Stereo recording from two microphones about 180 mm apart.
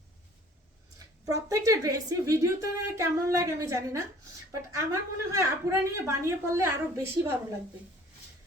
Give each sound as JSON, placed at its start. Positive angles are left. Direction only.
{"t": 0.9, "sound": "a woman's voice", "side_deg": -20}